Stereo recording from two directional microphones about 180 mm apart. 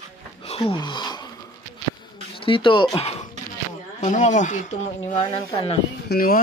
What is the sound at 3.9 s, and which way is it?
Speech, 40° left (ahead or behind).